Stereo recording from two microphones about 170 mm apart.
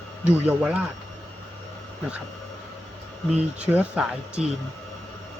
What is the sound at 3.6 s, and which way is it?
Speech, 10° right (ahead or behind).